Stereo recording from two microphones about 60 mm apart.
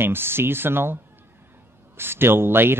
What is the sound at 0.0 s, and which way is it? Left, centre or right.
Speech, right.